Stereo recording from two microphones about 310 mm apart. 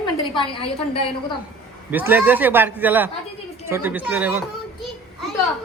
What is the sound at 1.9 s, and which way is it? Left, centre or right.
Speech, centre.